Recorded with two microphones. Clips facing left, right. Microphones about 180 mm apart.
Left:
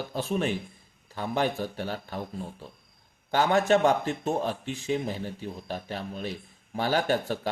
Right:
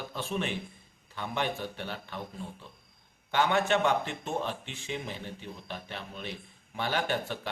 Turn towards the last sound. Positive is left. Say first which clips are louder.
# left 5 dB
turn(degrees=40)  # may be behind; listen again after turning